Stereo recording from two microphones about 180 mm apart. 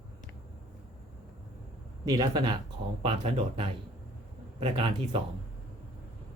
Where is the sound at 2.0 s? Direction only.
25° right (ahead or behind).